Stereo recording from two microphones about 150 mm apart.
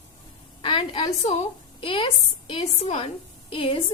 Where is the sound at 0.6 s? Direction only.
35° left (ahead or behind).